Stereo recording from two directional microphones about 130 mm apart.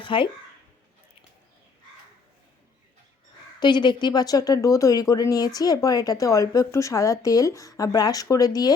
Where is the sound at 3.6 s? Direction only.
35° left (ahead or behind).